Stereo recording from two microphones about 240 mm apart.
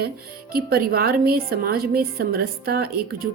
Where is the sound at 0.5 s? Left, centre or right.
Right.